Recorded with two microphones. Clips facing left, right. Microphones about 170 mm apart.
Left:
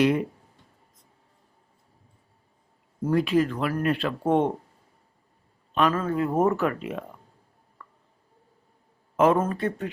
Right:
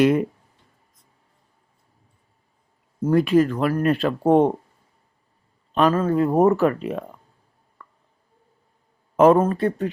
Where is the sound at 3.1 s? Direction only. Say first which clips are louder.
Right 5 dB; 45° right (ahead or behind).